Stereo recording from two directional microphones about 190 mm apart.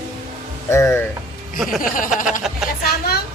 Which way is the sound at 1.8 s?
45° left (ahead or behind).